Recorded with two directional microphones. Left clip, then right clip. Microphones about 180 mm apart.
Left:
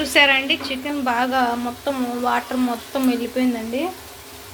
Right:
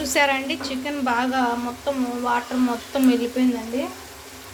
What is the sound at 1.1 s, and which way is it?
Speech, 15° left (ahead or behind).